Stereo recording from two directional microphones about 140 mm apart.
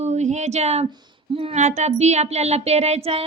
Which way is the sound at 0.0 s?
55° right (ahead or behind).